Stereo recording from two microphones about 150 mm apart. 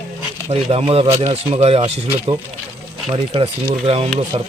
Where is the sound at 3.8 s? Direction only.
40° right (ahead or behind).